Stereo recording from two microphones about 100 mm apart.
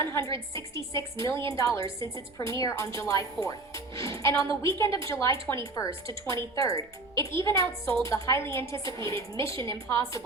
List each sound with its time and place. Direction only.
0.0 s a woman's voice: 25° left (ahead or behind)